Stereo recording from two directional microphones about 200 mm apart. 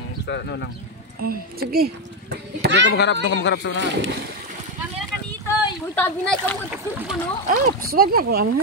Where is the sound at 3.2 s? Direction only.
65° left (ahead or behind).